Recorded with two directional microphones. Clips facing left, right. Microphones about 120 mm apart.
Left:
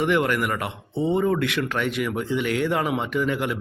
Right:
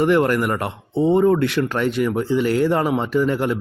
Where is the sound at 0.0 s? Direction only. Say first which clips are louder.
Right 5 dB; 40° right (ahead or behind).